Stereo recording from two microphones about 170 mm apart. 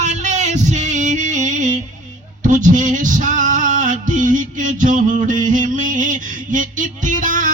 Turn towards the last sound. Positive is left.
turn(degrees=-50)  # may be behind; listen again after turning